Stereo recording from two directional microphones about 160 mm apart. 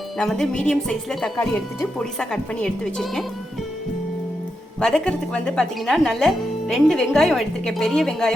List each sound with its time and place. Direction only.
0.2 s speech: 5° left (ahead or behind)
1.4 s speech: 15° left (ahead or behind)
2.0 s speech: 5° left (ahead or behind)
4.8 s speech: 5° left (ahead or behind)